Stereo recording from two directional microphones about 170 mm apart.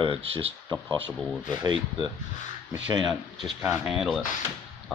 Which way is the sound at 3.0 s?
Centre (ahead or behind).